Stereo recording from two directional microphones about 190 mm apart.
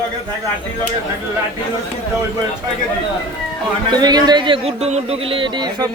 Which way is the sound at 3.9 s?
20° right (ahead or behind).